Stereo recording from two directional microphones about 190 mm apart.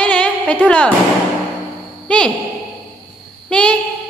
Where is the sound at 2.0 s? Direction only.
5° left (ahead or behind).